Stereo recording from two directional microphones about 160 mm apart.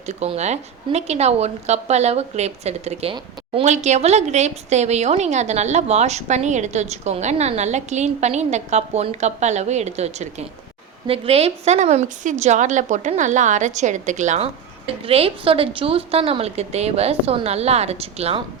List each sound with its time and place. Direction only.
0.1 s a woman's voice: 45° right (ahead or behind)